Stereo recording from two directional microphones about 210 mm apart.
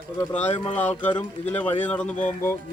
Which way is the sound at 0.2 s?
10° left (ahead or behind).